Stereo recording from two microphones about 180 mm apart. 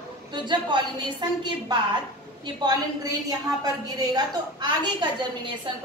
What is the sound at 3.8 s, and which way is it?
A woman's voice, 20° right (ahead or behind).